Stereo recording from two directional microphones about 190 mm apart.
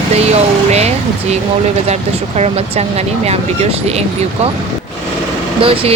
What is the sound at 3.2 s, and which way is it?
Speech, 35° right (ahead or behind).